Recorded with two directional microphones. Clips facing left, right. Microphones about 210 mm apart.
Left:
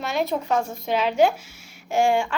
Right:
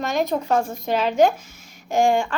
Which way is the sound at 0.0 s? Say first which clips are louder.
Right 2 dB; 40° right (ahead or behind).